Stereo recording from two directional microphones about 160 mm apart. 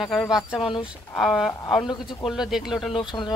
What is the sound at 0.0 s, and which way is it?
A man's voice, centre (ahead or behind).